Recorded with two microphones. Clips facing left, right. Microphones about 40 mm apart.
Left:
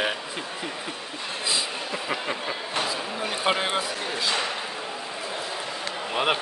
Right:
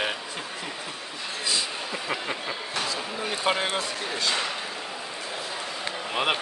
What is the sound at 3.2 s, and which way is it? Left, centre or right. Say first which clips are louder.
A man's voice: left 1 dB; centre.